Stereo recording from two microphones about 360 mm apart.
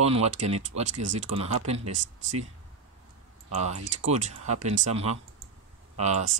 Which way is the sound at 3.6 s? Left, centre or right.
Centre.